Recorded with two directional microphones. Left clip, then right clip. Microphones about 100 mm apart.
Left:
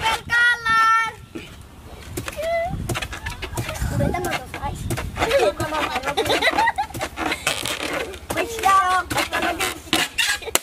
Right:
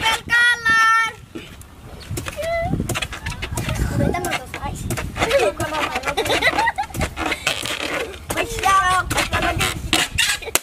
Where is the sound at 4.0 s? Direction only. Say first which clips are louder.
Right 1 dB; centre (ahead or behind).